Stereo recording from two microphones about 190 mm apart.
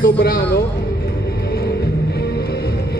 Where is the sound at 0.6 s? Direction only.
55° left (ahead or behind).